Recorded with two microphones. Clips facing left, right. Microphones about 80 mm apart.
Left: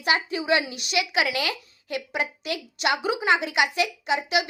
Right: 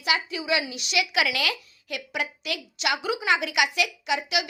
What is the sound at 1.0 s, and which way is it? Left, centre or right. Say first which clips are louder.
A woman's voice: even; left.